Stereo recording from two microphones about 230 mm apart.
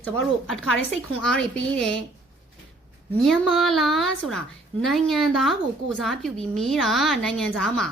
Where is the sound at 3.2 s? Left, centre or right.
Centre.